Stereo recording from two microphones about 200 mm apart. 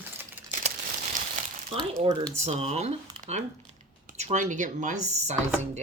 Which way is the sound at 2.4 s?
35° right (ahead or behind).